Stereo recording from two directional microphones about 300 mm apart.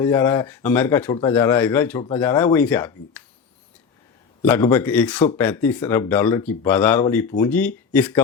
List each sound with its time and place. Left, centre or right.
0.0 s speech: centre
4.4 s speech: centre